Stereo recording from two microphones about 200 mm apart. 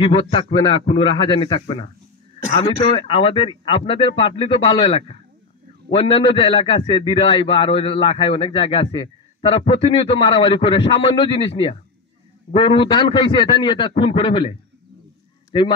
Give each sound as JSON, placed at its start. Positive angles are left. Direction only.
{"t": 0.0, "sound": "a man's voice", "side_deg": 25}